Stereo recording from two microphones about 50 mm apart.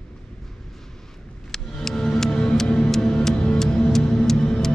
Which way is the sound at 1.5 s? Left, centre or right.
Centre.